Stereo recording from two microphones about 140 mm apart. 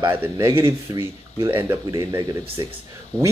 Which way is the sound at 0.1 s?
15° right (ahead or behind).